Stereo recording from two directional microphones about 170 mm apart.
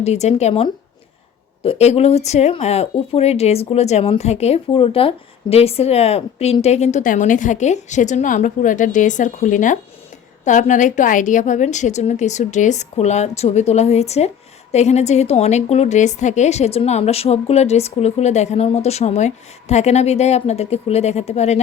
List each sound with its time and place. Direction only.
0.0 s a woman's voice: 40° left (ahead or behind)